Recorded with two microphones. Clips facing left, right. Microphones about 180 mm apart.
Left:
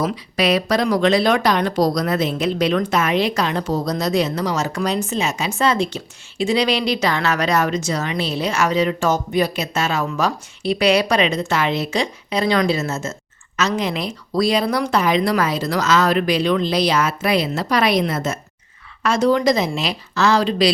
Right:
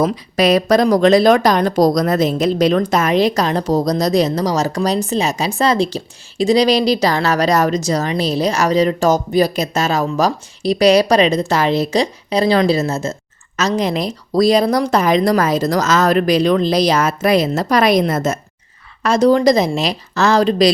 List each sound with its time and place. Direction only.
0.0 s speech: 40° right (ahead or behind)